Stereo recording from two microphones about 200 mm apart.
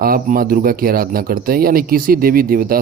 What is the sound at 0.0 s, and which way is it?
Speech, 45° right (ahead or behind).